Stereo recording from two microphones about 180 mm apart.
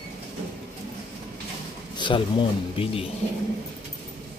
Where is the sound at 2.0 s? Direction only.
25° left (ahead or behind).